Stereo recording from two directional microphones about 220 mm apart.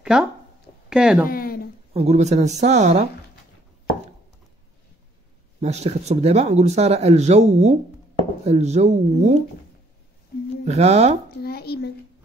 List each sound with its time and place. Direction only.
0.0 s speech: 5° right (ahead or behind)
1.3 s a sound: 40° left (ahead or behind)
2.0 s speech: 30° right (ahead or behind)
5.6 s speech: 30° right (ahead or behind)
10.6 s speech: 30° right (ahead or behind)
11.4 s a child's voice: 45° left (ahead or behind)